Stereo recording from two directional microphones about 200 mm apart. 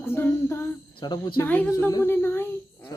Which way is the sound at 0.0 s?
10° left (ahead or behind).